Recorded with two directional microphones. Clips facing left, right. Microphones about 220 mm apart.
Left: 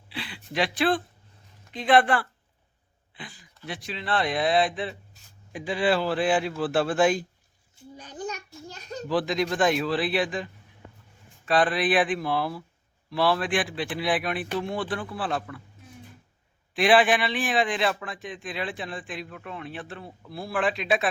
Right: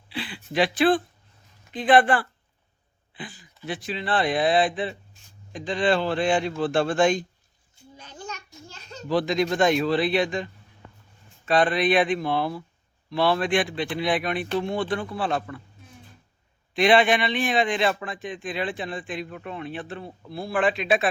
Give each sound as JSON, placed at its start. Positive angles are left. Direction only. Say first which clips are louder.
{"t": 0.1, "sound": "a man's voice", "louder": "right 4 dB", "side_deg": 0}
{"t": 8.1, "sound": "a sound", "louder": "left 5 dB", "side_deg": 35}
{"t": 9.0, "sound": "a man's voice", "louder": "right 3 dB", "side_deg": 0}
{"t": 16.7, "sound": "a man's voice", "louder": "right 1 dB", "side_deg": 0}